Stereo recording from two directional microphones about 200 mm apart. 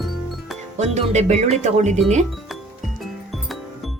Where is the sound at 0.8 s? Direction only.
35° right (ahead or behind).